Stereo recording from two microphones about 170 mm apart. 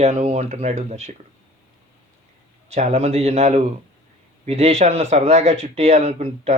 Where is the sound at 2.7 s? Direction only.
40° right (ahead or behind).